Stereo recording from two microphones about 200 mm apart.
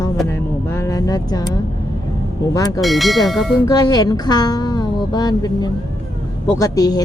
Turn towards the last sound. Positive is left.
turn(degrees=20)  # may be behind; listen again after turning